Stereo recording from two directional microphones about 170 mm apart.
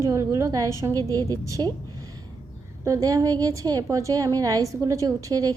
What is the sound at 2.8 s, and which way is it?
A woman's voice, 20° right (ahead or behind).